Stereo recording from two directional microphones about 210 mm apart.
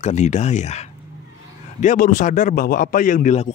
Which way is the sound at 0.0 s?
35° left (ahead or behind).